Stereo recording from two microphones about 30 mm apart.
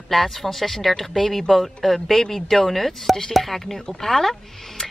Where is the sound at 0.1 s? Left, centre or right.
Centre.